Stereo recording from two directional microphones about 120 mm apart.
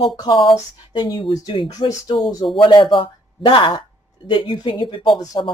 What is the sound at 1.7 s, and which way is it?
Speech, 30° left (ahead or behind).